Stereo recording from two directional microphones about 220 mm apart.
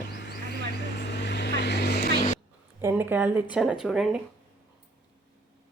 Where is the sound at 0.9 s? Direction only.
50° left (ahead or behind).